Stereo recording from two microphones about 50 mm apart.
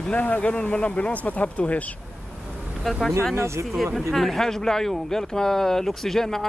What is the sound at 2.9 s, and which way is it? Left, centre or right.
Speech, centre.